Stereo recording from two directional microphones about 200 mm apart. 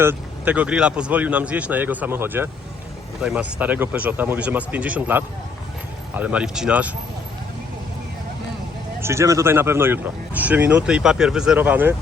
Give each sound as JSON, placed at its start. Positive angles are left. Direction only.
{"t": 0.0, "sound": "speech", "side_deg": -10}
{"t": 9.0, "sound": "speech", "side_deg": -15}